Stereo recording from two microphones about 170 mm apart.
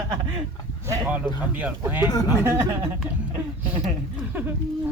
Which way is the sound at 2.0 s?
25° left (ahead or behind).